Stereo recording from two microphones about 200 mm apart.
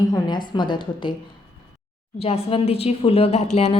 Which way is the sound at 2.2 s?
30° left (ahead or behind).